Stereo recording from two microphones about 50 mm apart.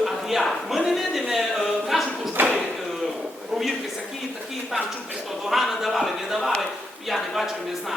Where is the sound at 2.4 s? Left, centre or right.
Right.